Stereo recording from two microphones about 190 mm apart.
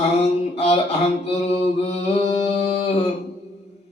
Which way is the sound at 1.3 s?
35° left (ahead or behind).